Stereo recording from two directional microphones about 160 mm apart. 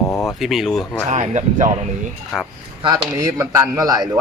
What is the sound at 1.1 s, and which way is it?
Speech, 45° right (ahead or behind).